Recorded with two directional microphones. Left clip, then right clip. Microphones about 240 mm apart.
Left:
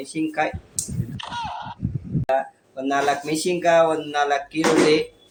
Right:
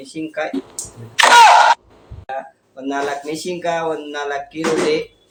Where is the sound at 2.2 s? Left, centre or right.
Left.